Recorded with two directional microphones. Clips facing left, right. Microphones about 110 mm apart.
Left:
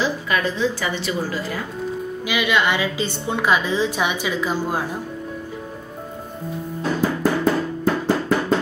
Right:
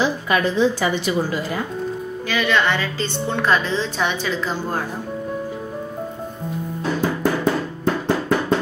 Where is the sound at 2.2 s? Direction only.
10° left (ahead or behind).